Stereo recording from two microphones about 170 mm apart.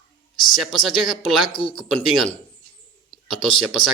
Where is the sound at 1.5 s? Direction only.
30° left (ahead or behind).